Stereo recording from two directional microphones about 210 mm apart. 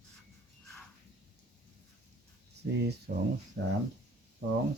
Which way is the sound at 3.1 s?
45° right (ahead or behind).